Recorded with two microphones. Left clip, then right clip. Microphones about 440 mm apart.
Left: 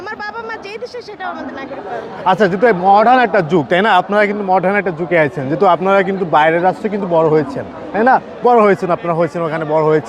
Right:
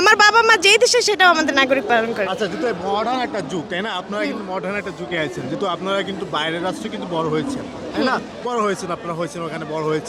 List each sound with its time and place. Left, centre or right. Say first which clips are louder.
0.0 s speech: right 13 dB; right
2.2 s a man's voice: left 10 dB; left